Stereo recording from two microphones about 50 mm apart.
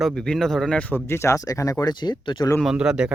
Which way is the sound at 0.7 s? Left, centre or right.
Left.